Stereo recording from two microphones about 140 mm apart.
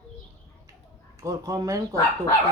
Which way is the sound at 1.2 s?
25° right (ahead or behind).